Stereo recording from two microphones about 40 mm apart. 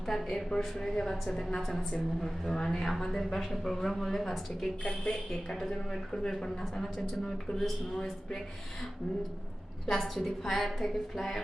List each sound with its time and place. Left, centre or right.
0.1 s a woman's voice: centre
7.9 s a woman's voice: centre
9.9 s a woman's voice: centre